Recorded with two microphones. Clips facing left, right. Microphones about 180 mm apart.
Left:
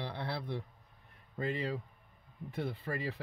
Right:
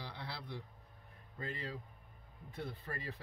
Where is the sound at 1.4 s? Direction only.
70° left (ahead or behind).